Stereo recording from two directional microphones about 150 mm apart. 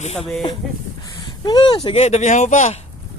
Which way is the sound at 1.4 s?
30° left (ahead or behind).